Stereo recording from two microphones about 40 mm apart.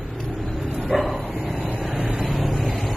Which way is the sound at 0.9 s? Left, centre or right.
Centre.